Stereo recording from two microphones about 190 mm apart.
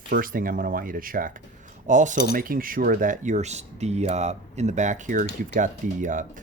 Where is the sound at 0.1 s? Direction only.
50° right (ahead or behind).